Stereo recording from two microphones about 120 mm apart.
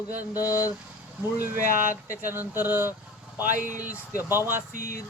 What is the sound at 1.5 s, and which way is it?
Speech, 90° right.